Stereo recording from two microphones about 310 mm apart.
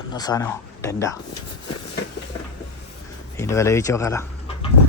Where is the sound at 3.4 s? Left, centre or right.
Centre.